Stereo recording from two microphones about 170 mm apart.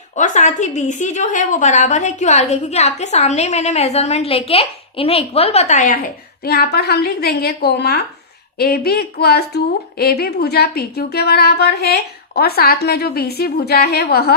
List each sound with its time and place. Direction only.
0.2 s a woman's voice: 45° left (ahead or behind)
6.4 s a woman's voice: 70° left (ahead or behind)